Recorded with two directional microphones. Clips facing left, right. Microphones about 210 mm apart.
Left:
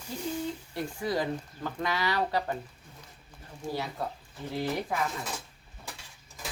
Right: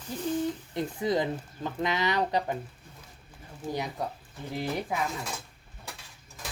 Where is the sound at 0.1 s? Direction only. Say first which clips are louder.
Right 4 dB; 15° right (ahead or behind).